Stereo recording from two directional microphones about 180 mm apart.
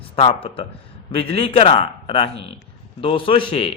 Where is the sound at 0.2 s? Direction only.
30° left (ahead or behind).